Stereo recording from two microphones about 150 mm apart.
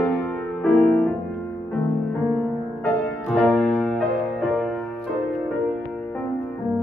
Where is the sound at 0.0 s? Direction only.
10° left (ahead or behind).